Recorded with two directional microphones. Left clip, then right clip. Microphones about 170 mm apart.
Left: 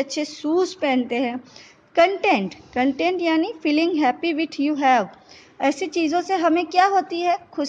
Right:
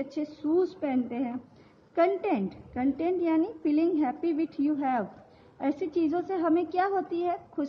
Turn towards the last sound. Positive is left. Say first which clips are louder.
# left 8 dB
turn(degrees=10)  # may be behind; listen again after turning